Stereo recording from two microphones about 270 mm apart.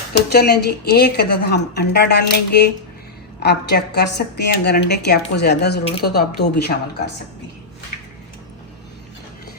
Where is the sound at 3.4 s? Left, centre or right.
Left.